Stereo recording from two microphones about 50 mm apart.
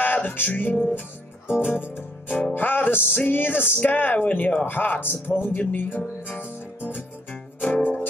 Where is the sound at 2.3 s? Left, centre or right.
Left.